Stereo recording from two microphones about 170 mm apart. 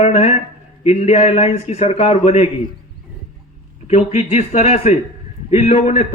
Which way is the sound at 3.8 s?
40° left (ahead or behind).